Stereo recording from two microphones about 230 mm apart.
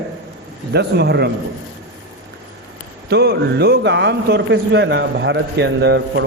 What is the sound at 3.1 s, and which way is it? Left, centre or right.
A man's voice, right.